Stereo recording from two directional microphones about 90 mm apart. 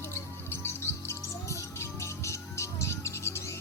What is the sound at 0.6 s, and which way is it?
Music, 30° left (ahead or behind).